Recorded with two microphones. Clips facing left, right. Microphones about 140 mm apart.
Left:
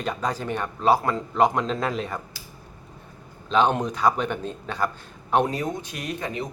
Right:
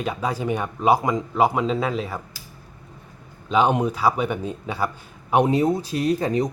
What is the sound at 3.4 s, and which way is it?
Speech, 10° right (ahead or behind).